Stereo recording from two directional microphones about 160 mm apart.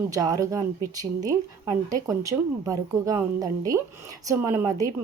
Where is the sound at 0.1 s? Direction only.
20° right (ahead or behind).